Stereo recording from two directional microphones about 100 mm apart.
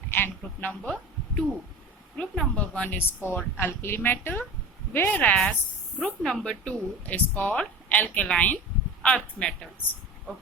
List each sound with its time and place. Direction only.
0.1 s speech: 20° left (ahead or behind)
2.1 s a woman's voice: 10° left (ahead or behind)
6.0 s speech: 5° left (ahead or behind)